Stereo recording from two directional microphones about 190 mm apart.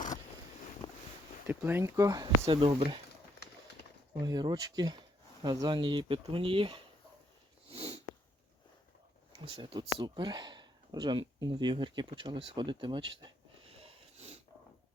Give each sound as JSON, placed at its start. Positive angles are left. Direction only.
{"t": 0.8, "sound": "a sound", "side_deg": 25}
{"t": 1.5, "sound": "speech", "side_deg": -10}
{"t": 4.2, "sound": "speech", "side_deg": -20}
{"t": 7.7, "sound": "sniff", "side_deg": -30}
{"t": 9.4, "sound": "speech", "side_deg": -25}